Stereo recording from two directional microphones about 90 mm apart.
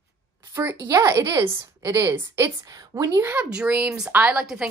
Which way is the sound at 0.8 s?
40° right (ahead or behind).